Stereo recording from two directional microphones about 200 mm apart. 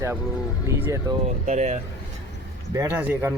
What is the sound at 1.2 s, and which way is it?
Speech, 35° right (ahead or behind).